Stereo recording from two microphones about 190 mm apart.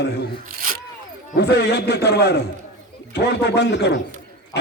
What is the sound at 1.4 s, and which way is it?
Speech, 60° left (ahead or behind).